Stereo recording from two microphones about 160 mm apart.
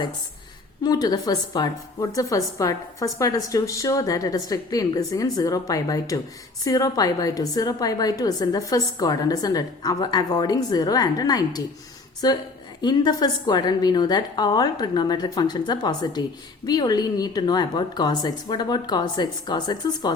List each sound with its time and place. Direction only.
0.8 s a woman's voice: 25° left (ahead or behind)